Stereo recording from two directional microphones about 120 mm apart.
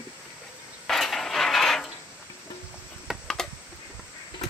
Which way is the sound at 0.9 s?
5° left (ahead or behind).